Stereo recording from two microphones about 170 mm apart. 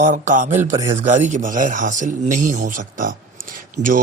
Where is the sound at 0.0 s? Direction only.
50° right (ahead or behind).